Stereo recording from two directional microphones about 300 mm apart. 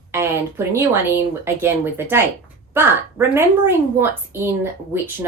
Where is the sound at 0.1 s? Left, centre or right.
Centre.